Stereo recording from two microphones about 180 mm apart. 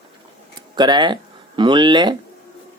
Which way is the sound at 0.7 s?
25° right (ahead or behind).